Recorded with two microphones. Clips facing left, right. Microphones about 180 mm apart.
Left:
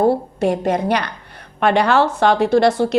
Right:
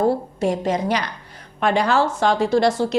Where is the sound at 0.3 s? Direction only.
60° left (ahead or behind).